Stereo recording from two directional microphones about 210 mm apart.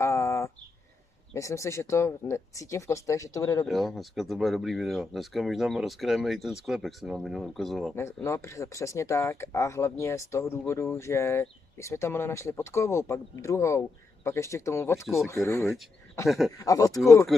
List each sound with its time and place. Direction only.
0.0 s a sound: 15° left (ahead or behind)
1.3 s speech: 15° left (ahead or behind)
3.6 s speech: centre (ahead or behind)
7.9 s speech: 15° left (ahead or behind)
16.3 s speech: centre (ahead or behind)
16.5 s speech: 15° left (ahead or behind)